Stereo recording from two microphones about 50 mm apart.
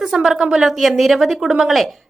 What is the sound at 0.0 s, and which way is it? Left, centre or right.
Speech, centre.